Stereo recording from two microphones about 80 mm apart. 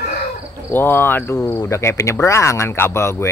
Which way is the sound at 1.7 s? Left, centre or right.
Left.